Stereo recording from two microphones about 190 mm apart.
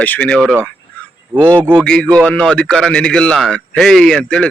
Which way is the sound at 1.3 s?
10° right (ahead or behind).